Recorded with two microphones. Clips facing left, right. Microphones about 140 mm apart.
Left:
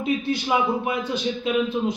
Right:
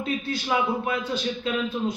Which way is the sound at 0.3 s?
20° left (ahead or behind).